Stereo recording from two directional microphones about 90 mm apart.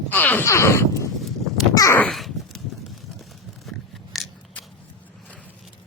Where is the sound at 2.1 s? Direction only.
Centre (ahead or behind).